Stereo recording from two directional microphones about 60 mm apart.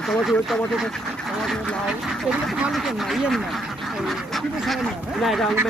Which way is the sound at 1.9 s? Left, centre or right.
Centre.